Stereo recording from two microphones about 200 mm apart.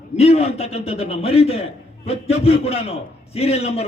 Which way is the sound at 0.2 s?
30° left (ahead or behind).